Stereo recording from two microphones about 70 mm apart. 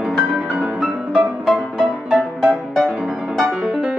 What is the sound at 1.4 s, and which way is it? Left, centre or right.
Music, centre.